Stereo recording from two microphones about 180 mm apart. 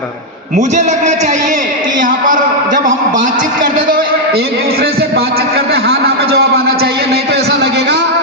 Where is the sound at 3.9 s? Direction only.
60° right (ahead or behind).